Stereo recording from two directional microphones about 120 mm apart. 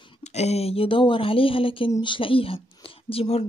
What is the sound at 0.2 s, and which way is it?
Speech, 65° left (ahead or behind).